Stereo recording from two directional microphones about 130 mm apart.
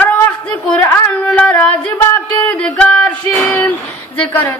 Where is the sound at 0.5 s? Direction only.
20° left (ahead or behind).